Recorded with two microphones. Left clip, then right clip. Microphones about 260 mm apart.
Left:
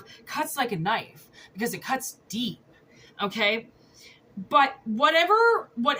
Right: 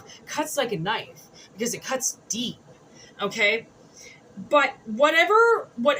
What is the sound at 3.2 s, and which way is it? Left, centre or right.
Speech, centre.